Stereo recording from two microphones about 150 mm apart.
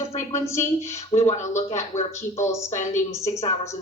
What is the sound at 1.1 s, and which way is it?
Speech, 40° left (ahead or behind).